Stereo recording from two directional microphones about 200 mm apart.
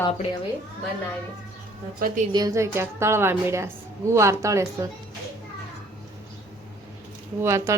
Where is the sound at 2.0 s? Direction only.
45° right (ahead or behind).